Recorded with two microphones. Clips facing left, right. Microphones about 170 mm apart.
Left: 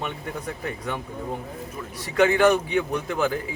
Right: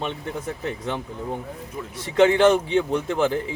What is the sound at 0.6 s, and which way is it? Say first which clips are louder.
Speech: right 2 dB; 25° right (ahead or behind).